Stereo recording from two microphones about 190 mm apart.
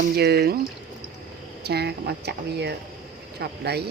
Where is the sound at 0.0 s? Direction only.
60° right (ahead or behind).